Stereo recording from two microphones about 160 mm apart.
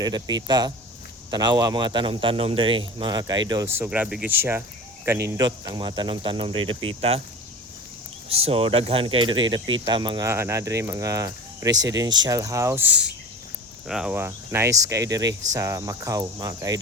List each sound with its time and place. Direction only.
0.0 s speech: 25° right (ahead or behind)
5.4 s speech: 25° right (ahead or behind)
8.3 s speech: 40° right (ahead or behind)
10.2 s speech: 15° right (ahead or behind)